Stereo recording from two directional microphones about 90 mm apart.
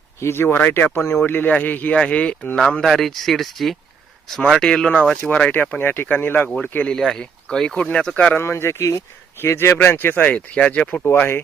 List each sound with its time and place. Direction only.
0.2 s speech: 30° left (ahead or behind)
6.7 s speech: 10° left (ahead or behind)
8.4 s speech: 30° left (ahead or behind)